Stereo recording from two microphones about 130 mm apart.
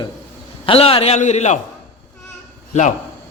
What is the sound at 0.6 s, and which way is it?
Speech, 45° left (ahead or behind).